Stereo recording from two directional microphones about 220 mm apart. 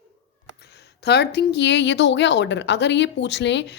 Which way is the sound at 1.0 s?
50° left (ahead or behind).